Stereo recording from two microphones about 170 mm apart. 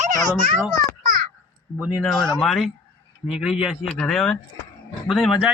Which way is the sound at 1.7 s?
10° right (ahead or behind).